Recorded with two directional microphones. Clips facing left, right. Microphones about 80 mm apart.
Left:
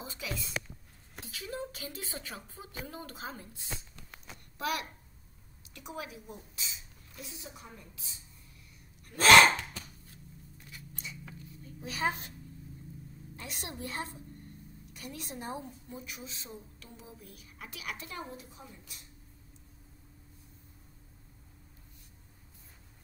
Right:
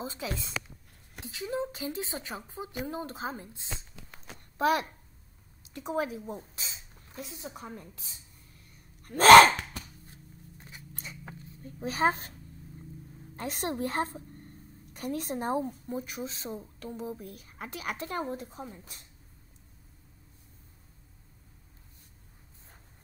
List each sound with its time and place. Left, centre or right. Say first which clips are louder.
0.0 s a child's voice: right 4 dB; right
11.0 s a sound: right 1 dB; right
13.4 s a child's voice: right 10 dB; right